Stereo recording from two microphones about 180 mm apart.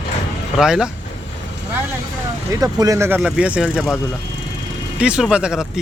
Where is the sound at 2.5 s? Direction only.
20° right (ahead or behind).